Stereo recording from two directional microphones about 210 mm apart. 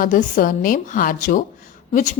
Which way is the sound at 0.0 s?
40° left (ahead or behind).